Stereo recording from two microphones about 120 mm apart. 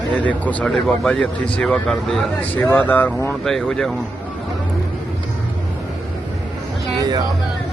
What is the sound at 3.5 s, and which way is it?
Speech, 5° left (ahead or behind).